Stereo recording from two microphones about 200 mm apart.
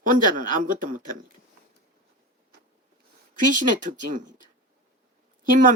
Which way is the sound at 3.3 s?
40° right (ahead or behind).